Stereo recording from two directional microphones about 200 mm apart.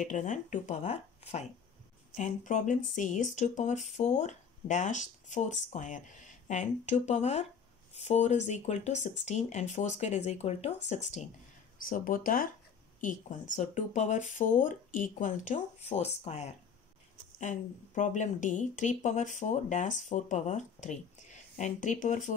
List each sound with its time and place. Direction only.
0.0 s speech: 40° left (ahead or behind)